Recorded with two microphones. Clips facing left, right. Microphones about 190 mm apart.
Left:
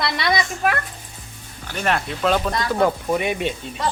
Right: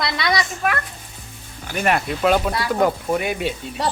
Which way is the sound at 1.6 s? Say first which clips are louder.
Right 2 dB; 10° right (ahead or behind).